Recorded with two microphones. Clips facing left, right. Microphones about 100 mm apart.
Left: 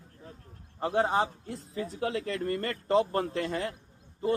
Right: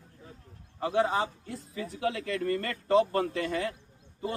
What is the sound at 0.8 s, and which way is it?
A man's voice, 35° left (ahead or behind).